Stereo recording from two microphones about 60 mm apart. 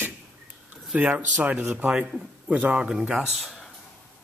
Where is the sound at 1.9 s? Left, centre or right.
Centre.